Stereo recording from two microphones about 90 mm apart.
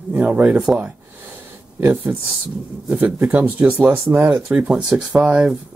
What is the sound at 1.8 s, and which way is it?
Speech, 25° right (ahead or behind).